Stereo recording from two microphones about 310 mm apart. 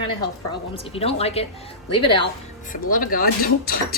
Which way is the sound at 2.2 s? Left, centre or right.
Left.